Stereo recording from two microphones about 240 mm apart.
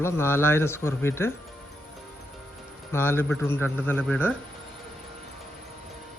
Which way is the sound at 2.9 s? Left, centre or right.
Centre.